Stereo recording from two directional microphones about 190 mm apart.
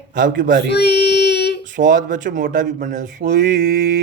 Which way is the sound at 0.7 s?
60° left (ahead or behind).